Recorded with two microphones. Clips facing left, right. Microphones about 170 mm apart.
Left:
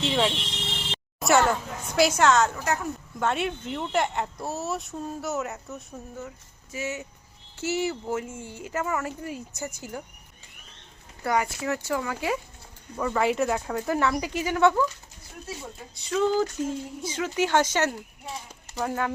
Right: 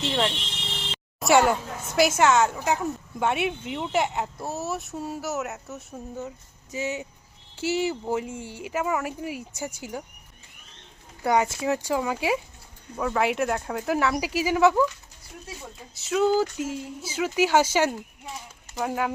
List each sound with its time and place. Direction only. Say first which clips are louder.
0.1 s speech: left 1 dB; centre (ahead or behind)
1.2 s speech: right 2 dB; 10° right (ahead or behind)
6.1 s speech: right 3 dB; 20° right (ahead or behind)
11.2 s speech: right 3 dB; 20° right (ahead or behind)
13.0 s speech: even; centre (ahead or behind)
16.0 s speech: right 2 dB; 5° right (ahead or behind)